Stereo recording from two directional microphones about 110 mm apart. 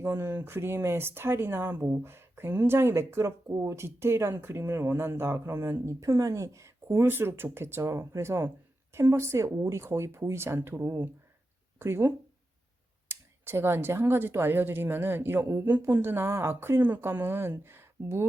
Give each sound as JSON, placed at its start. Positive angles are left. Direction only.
{"t": 0.0, "sound": "speech", "side_deg": -25}